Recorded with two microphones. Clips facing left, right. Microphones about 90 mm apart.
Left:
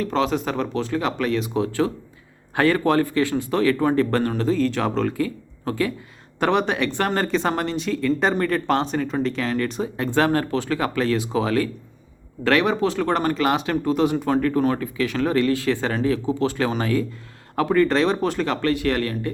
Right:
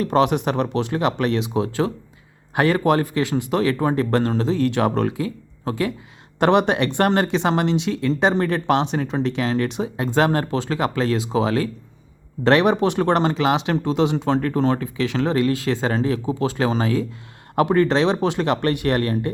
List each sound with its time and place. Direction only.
0.3 s speech: 20° right (ahead or behind)
6.5 s speech: 60° right (ahead or behind)
7.1 s speech: 20° right (ahead or behind)